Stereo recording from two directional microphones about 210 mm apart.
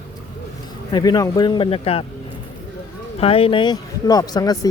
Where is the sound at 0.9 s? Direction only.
20° left (ahead or behind).